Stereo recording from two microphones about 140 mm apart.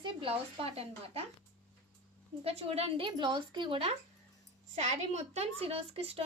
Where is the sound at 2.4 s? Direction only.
45° right (ahead or behind).